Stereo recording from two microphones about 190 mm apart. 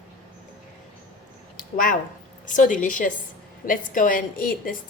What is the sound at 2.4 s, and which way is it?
A woman's voice, 40° left (ahead or behind).